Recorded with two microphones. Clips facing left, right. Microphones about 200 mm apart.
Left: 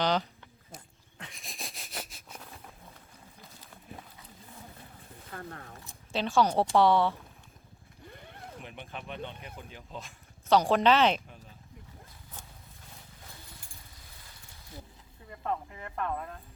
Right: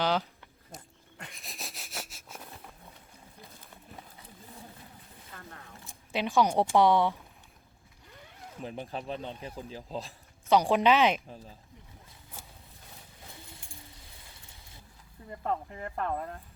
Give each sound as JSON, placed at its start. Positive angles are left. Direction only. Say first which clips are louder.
{"t": 0.0, "sound": "speech", "louder": "even", "side_deg": -5}
{"t": 1.2, "sound": "a sound", "louder": "even", "side_deg": 0}
{"t": 5.3, "sound": "a sound", "louder": "left 6 dB", "side_deg": 50}
{"t": 6.1, "sound": "speech", "louder": "even", "side_deg": -15}
{"t": 8.6, "sound": "speech", "louder": "right 9 dB", "side_deg": -35}
{"t": 10.5, "sound": "speech", "louder": "even", "side_deg": -15}
{"t": 15.3, "sound": "speech", "louder": "right 1 dB", "side_deg": -35}